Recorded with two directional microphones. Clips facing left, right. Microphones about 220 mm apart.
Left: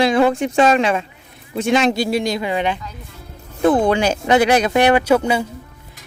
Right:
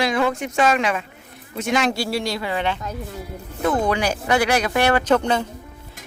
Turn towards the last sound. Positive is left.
turn(degrees=10)  # may be behind; listen again after turning